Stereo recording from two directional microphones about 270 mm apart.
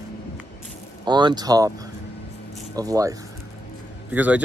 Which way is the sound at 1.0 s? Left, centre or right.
Centre.